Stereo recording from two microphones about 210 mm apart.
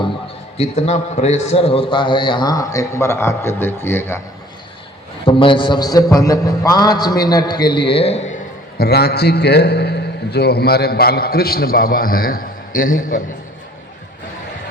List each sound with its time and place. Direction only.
0.5 s a man's voice: 30° left (ahead or behind); by 4.2 s 10° left (ahead or behind)
5.2 s a man's voice: 25° left (ahead or behind)
8.8 s a man's voice: 50° left (ahead or behind)